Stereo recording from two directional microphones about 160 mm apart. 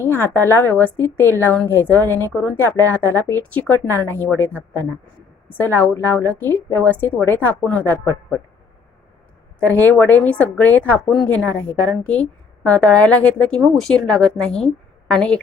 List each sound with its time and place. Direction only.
0.0 s a woman's voice: 15° left (ahead or behind)
9.6 s a woman's voice: 10° left (ahead or behind)